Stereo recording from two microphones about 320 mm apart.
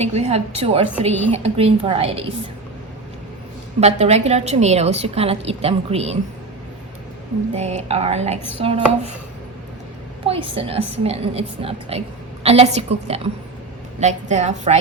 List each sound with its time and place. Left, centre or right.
0.0 s a woman's voice: centre
3.8 s a woman's voice: centre
7.5 s a woman's voice: centre
10.2 s a woman's voice: centre